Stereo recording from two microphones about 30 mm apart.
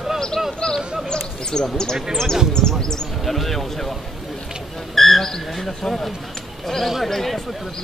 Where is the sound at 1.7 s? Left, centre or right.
Centre.